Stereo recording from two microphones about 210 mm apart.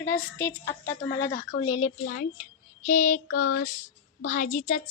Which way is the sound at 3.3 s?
85° left.